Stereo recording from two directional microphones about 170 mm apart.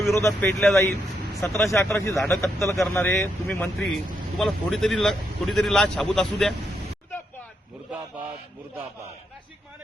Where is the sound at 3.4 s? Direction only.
10° left (ahead or behind).